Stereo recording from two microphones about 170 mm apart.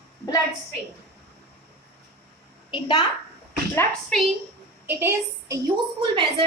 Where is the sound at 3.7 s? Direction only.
15° left (ahead or behind).